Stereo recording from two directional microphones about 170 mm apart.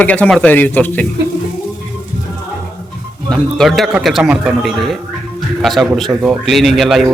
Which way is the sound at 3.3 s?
Centre (ahead or behind).